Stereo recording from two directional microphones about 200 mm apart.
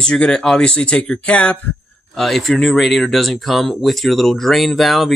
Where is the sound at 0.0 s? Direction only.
5° left (ahead or behind).